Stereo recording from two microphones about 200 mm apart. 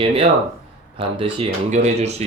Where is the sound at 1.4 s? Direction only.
35° right (ahead or behind).